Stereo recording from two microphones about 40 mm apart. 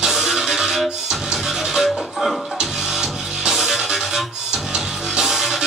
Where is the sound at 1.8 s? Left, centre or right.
Centre.